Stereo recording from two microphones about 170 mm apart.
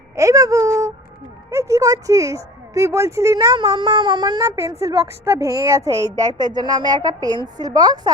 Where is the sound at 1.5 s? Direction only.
15° right (ahead or behind).